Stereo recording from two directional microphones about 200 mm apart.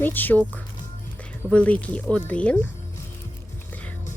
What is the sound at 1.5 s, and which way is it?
Speech, 5° left (ahead or behind).